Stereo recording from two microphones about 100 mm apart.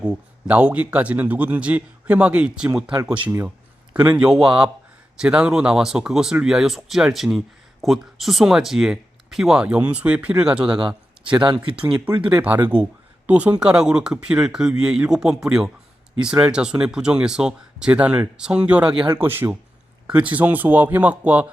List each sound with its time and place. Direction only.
0.0 s speech: 15° right (ahead or behind)
11.3 s speech: 55° right (ahead or behind)
12.2 s speech: 15° right (ahead or behind)
19.2 s speech: 20° right (ahead or behind)